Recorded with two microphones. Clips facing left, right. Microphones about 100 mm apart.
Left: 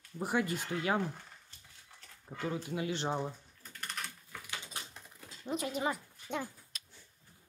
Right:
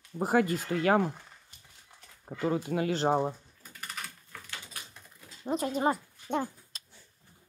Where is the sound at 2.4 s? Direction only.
50° right (ahead or behind).